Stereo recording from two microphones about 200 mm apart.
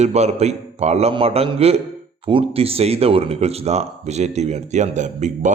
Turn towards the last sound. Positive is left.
turn(degrees=-35)  # may be behind; listen again after turning